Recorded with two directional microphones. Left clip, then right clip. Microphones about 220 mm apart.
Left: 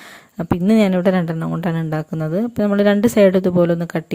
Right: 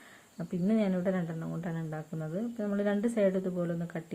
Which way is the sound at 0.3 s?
50° left (ahead or behind).